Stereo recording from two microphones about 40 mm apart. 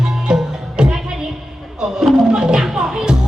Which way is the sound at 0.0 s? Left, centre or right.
Centre.